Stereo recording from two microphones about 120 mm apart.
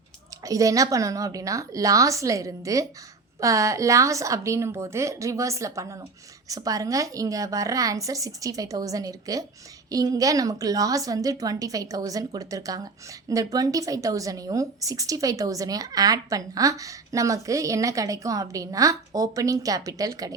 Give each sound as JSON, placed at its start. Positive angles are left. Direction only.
{"t": 0.4, "sound": "a woman's voice", "side_deg": -30}